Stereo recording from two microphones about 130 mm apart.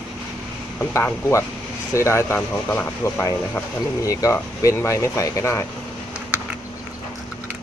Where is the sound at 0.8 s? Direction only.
20° left (ahead or behind).